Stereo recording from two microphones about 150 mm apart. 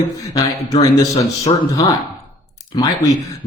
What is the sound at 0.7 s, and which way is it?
Speech, 20° left (ahead or behind).